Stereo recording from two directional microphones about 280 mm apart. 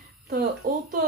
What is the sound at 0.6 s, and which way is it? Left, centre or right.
Speech, right.